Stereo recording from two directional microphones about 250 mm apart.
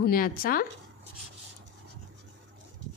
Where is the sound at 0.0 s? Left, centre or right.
Left.